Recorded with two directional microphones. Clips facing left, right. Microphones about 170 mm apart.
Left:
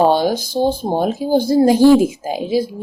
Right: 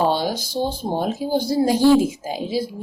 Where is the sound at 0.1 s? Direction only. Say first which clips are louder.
Left 6 dB; 50° left (ahead or behind).